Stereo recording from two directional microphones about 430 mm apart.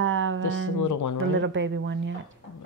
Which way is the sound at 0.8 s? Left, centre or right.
Left.